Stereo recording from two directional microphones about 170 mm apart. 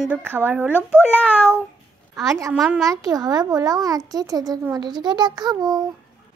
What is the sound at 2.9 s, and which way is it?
A child's voice, 20° right (ahead or behind).